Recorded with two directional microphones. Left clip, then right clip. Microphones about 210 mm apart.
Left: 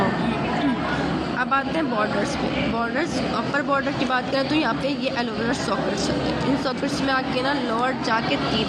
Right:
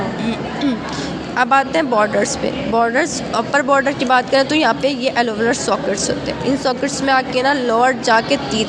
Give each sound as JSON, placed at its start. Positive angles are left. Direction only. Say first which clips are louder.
{"t": 1.4, "sound": "speech", "louder": "right 10 dB", "side_deg": -40}